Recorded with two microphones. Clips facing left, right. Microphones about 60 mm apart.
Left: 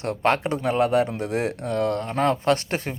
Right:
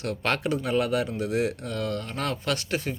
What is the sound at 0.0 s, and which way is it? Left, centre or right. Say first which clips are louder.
Speech: left 5 dB; left.